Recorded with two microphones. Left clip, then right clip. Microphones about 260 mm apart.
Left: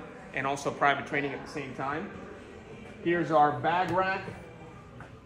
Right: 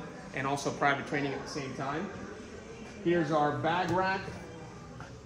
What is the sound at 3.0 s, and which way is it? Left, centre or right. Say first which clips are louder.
Speech: left 4 dB; centre.